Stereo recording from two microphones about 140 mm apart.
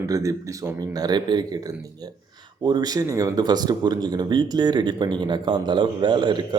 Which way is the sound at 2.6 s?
30° right (ahead or behind).